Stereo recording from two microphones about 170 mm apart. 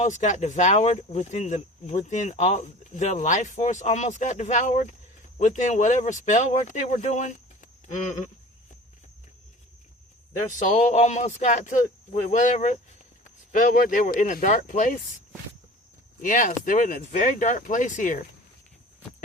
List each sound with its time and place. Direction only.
0.0 s speech: 45° left (ahead or behind)
10.6 s speech: 45° left (ahead or behind)
16.2 s speech: 50° left (ahead or behind)